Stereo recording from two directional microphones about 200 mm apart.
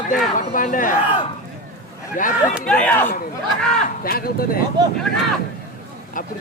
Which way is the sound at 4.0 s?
50° left (ahead or behind).